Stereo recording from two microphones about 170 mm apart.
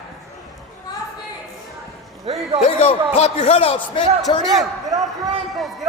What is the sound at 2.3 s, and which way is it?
Speech, 35° right (ahead or behind).